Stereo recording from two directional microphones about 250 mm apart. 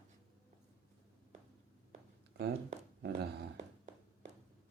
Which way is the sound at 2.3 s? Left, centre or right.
Right.